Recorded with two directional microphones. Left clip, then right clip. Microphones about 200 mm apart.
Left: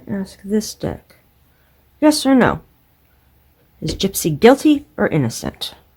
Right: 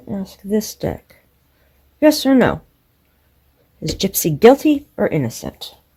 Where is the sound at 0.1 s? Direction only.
10° right (ahead or behind).